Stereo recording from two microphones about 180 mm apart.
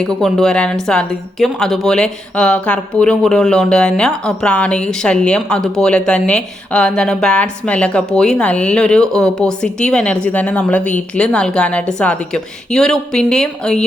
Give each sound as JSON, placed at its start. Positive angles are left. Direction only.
{"t": 0.2, "sound": "speech", "side_deg": 5}